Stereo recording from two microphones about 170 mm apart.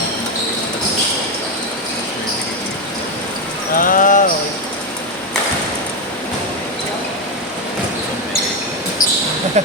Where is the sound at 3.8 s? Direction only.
55° left (ahead or behind).